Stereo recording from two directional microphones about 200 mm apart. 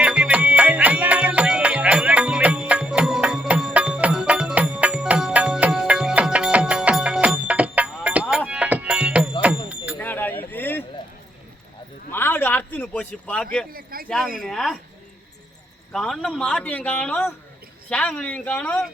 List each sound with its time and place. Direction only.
0.0 s music: 5° right (ahead or behind)
10.0 s a sound: 10° left (ahead or behind)
12.1 s a sound: 10° left (ahead or behind)
13.7 s a man's voice: 45° right (ahead or behind)
14.4 s a man's voice: centre (ahead or behind)
15.9 s a man's voice: centre (ahead or behind)